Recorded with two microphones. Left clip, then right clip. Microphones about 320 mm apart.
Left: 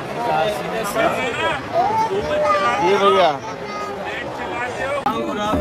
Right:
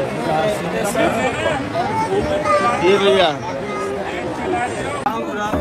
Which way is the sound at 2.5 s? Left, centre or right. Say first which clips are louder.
Right 3 dB; left.